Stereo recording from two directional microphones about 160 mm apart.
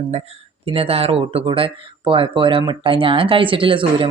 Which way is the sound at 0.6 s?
35° right (ahead or behind).